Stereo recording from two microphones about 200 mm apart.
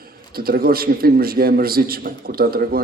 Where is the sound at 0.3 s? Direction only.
50° right (ahead or behind).